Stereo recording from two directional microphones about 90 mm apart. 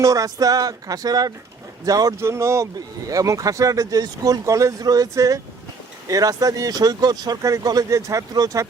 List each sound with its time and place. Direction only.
0.0 s speech: 35° right (ahead or behind)
2.1 s speech: 30° right (ahead or behind)